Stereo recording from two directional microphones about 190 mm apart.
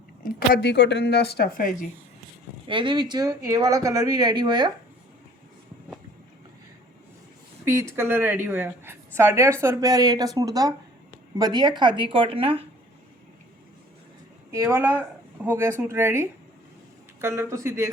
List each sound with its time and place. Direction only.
0.2 s speech: 50° left (ahead or behind)
2.6 s speech: 25° right (ahead or behind)
7.6 s a woman's voice: 15° right (ahead or behind); by 12.6 s 30° right (ahead or behind)
14.5 s a woman's voice: 15° right (ahead or behind)